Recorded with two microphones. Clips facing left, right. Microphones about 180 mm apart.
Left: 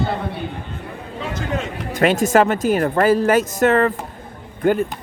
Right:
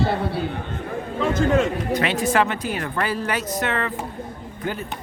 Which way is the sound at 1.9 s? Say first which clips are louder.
Left 5 dB; 45° left (ahead or behind).